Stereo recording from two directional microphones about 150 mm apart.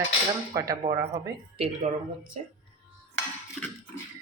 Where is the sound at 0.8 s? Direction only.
40° right (ahead or behind).